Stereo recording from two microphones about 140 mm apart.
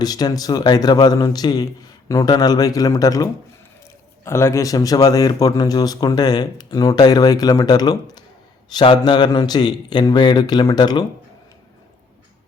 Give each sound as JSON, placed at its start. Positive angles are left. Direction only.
{"t": 0.0, "sound": "a man's voice", "side_deg": 30}